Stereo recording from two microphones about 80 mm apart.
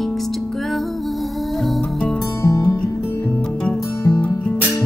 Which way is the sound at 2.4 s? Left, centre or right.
Left.